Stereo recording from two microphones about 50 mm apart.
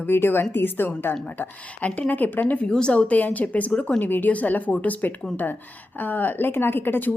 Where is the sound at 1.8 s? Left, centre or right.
Left.